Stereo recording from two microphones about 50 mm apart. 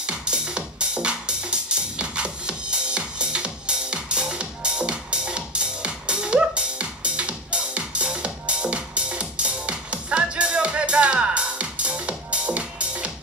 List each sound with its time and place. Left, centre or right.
0.0 s music: centre